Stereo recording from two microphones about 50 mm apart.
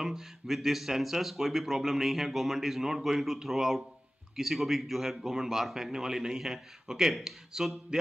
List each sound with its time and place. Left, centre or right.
0.0 s a man's voice: centre